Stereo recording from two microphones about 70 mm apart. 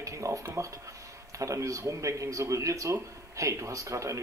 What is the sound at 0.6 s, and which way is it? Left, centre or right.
A man's voice, right.